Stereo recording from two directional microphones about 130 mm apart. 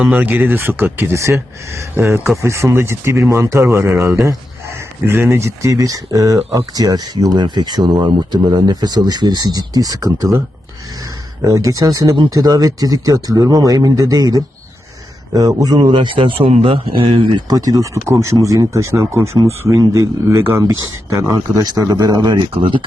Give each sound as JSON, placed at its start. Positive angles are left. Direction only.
{"t": 0.0, "sound": "speech", "side_deg": -15}
{"t": 11.4, "sound": "speech", "side_deg": -25}
{"t": 15.9, "sound": "speech", "side_deg": -40}